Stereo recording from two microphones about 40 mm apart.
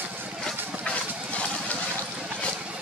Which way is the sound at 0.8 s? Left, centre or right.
Left.